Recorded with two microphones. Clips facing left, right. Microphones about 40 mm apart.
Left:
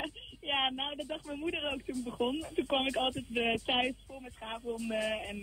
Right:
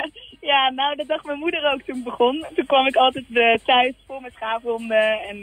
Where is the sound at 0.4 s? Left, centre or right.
Right.